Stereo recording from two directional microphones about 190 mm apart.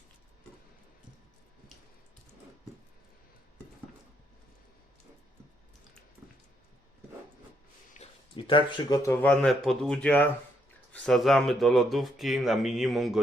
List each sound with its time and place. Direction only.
8.4 s speech: 25° left (ahead or behind); by 13.1 s centre (ahead or behind)